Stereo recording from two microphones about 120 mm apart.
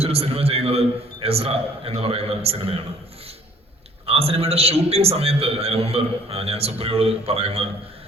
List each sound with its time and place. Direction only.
0.0 s a man's voice: 60° right (ahead or behind)
4.0 s a man's voice: 55° right (ahead or behind)